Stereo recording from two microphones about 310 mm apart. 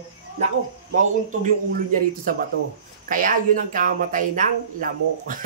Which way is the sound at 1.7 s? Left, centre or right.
Right.